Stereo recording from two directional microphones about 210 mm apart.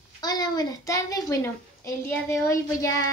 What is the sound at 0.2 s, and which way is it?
Speech, 20° left (ahead or behind).